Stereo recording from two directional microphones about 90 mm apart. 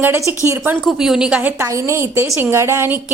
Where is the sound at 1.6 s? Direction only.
30° right (ahead or behind).